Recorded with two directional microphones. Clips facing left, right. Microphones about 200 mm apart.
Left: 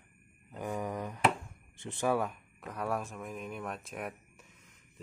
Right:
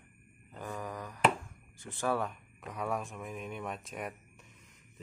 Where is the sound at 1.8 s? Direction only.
20° left (ahead or behind); by 4.1 s centre (ahead or behind).